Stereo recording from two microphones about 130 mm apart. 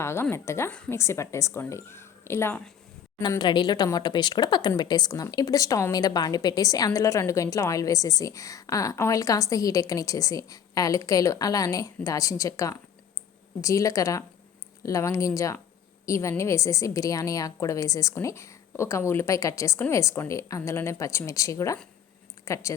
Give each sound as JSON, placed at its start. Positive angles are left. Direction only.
{"t": 0.0, "sound": "a woman's voice", "side_deg": 20}
{"t": 3.2, "sound": "a woman's voice", "side_deg": 30}